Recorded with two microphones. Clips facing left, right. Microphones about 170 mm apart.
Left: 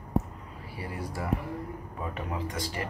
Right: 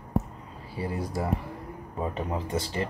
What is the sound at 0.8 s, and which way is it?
Speech, 25° right (ahead or behind).